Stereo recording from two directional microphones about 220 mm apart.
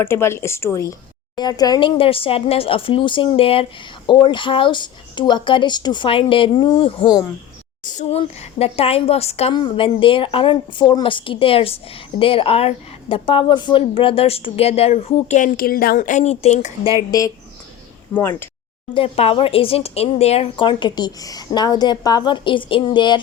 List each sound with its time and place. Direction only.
0.0 s speech: 10° left (ahead or behind)
7.9 s speech: 30° left (ahead or behind)
17.1 s speech: 15° left (ahead or behind)
18.9 s speech: 25° left (ahead or behind)